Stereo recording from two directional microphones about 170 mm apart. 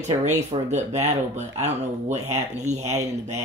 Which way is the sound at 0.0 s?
40° right (ahead or behind).